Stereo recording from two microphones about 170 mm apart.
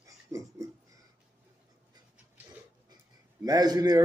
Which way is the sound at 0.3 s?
15° right (ahead or behind).